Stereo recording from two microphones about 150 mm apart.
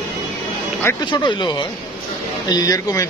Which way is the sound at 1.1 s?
30° left (ahead or behind).